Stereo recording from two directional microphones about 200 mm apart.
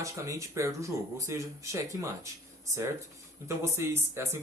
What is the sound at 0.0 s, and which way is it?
A man's voice, 15° right (ahead or behind).